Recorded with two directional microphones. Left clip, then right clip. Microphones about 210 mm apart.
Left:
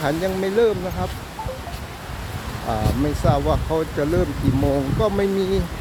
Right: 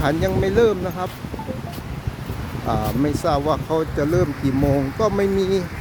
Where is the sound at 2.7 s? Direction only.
15° right (ahead or behind).